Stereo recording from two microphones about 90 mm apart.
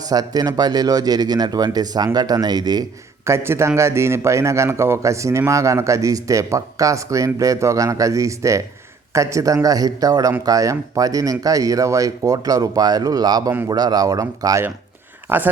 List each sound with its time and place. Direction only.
0.0 s speech: 45° right (ahead or behind)
3.2 s a man's voice: 30° right (ahead or behind)
15.3 s a man's voice: 20° right (ahead or behind)